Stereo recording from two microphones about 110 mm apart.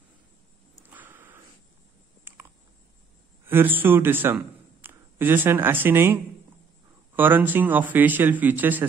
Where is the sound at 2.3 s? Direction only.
20° right (ahead or behind).